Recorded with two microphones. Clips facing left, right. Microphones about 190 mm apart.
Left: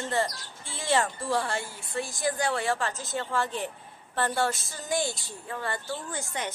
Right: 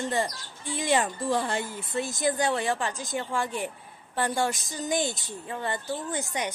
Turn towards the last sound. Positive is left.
turn(degrees=-15)  # may be behind; listen again after turning